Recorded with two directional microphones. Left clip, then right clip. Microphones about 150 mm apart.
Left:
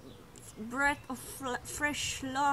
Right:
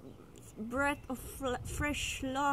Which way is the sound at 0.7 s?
15° right (ahead or behind).